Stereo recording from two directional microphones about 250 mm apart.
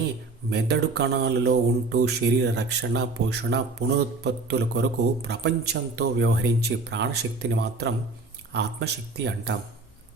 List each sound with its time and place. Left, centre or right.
0.5 s speech: right